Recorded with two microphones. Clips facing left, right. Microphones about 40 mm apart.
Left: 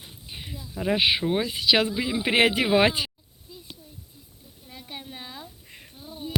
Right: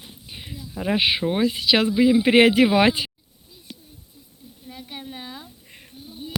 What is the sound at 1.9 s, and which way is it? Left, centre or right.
Speech, centre.